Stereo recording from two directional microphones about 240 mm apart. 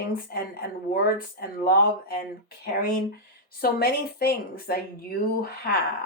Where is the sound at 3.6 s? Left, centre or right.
Left.